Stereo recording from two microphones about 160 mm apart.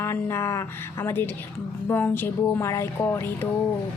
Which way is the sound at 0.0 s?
15° left (ahead or behind).